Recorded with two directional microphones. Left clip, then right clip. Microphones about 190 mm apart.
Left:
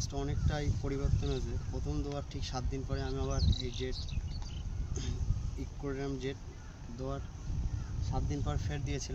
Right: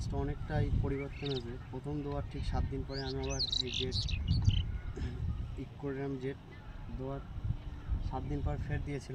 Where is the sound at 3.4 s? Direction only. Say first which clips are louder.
Right 5 dB; 45° left (ahead or behind).